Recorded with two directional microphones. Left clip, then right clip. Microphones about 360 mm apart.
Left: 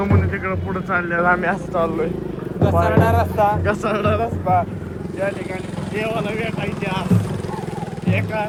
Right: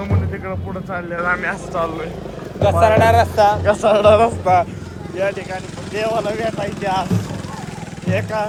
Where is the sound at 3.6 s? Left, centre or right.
Centre.